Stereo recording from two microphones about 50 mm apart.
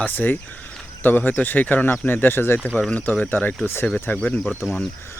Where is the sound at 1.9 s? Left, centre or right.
Left.